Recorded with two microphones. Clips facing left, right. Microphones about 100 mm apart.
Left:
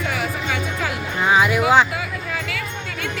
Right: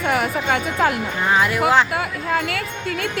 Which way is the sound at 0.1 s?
50° right (ahead or behind).